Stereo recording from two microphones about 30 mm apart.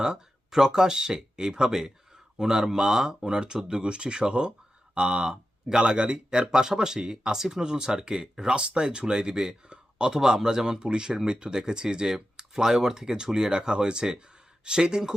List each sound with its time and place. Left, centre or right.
0.0 s speech: centre
3.8 s speech: right
5.3 s a sound: centre
5.8 s speech: right